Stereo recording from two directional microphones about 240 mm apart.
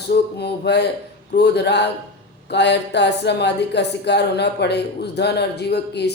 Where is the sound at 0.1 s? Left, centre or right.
Left.